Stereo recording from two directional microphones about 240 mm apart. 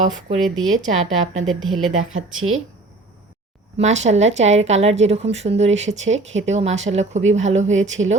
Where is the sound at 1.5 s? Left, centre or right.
Centre.